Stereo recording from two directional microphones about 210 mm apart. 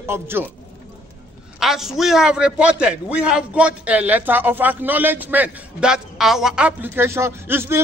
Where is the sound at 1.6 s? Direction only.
Centre (ahead or behind).